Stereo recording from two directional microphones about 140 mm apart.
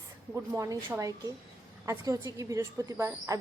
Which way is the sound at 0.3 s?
20° right (ahead or behind).